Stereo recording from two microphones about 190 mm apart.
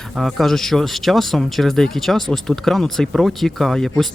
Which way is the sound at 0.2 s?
Centre (ahead or behind).